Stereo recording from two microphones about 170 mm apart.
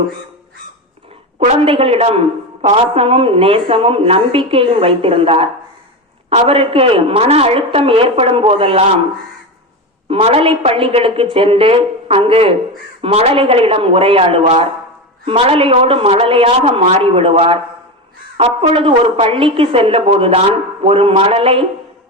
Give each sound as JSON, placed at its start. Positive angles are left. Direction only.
{"t": 1.5, "sound": "a woman's voice", "side_deg": -30}
{"t": 10.1, "sound": "a woman's voice", "side_deg": -35}